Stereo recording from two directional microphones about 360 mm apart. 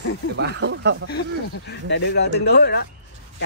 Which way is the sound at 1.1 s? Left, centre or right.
Left.